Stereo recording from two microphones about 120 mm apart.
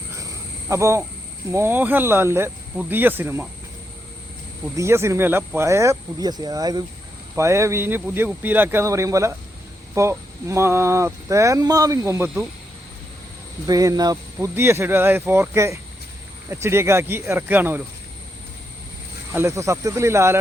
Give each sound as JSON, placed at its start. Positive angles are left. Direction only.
{"t": 0.2, "sound": "cricket", "side_deg": -25}
{"t": 1.5, "sound": "speech", "side_deg": -20}
{"t": 4.8, "sound": "speech", "side_deg": -20}
{"t": 13.7, "sound": "speech", "side_deg": -30}
{"t": 14.4, "sound": "speech", "side_deg": -20}
{"t": 19.3, "sound": "speech", "side_deg": -20}